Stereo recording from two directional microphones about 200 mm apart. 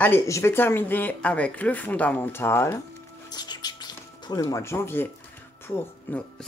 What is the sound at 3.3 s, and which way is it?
Music, 20° left (ahead or behind).